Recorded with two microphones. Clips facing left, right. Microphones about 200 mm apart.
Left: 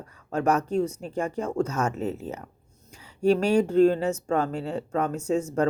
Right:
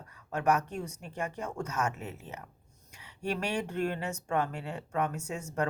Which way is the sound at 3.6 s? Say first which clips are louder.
Left 13 dB; 30° left (ahead or behind).